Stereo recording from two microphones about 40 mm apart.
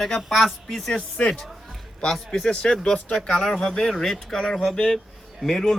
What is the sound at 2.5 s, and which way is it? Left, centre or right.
Speech, left.